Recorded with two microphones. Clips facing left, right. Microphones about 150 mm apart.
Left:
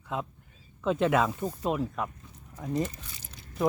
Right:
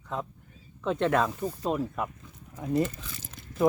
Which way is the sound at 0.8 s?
5° left (ahead or behind).